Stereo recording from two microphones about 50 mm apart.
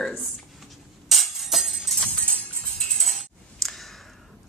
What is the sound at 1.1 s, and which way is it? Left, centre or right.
Music, centre.